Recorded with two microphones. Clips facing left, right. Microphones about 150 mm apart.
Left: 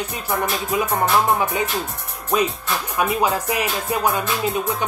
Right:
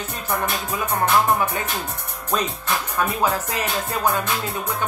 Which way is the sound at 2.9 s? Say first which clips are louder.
Left 3 dB; 15° left (ahead or behind).